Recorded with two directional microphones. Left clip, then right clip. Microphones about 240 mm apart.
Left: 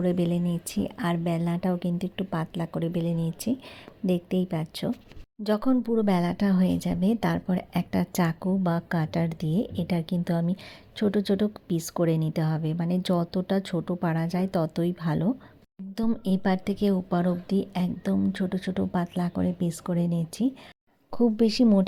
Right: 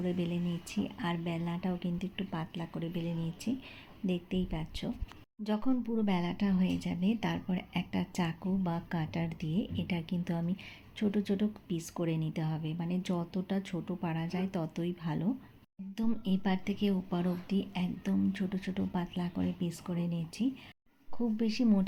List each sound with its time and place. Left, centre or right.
0.0 s a woman's voice: left